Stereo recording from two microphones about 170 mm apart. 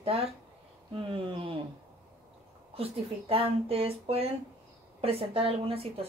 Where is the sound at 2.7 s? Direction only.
35° right (ahead or behind).